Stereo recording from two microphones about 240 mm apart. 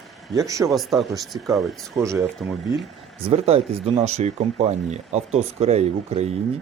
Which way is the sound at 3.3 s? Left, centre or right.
Right.